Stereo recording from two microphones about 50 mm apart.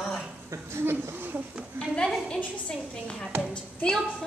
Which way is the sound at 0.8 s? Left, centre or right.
Right.